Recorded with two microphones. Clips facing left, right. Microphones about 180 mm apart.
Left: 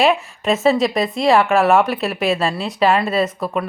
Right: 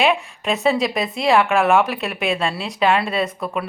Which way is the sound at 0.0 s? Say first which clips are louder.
Left 3 dB; centre (ahead or behind).